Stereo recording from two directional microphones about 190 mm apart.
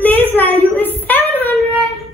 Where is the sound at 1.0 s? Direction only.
10° left (ahead or behind).